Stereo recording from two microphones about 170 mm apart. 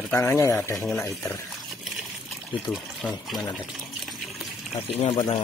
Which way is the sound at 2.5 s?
Centre (ahead or behind).